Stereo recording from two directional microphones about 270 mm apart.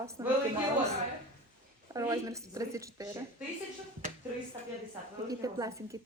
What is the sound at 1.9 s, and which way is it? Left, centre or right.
A woman's voice, centre.